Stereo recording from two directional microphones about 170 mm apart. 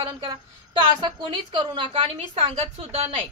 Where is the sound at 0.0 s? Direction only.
30° right (ahead or behind).